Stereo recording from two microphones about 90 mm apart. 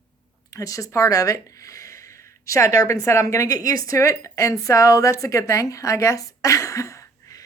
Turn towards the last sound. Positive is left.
turn(degrees=35)  # may be behind; listen again after turning